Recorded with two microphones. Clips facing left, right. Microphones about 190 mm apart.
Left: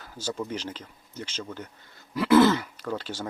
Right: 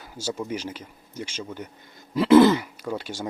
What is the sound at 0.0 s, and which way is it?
Speech, 10° right (ahead or behind).